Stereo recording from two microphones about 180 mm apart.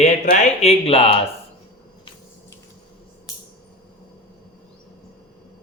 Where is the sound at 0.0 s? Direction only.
40° left (ahead or behind).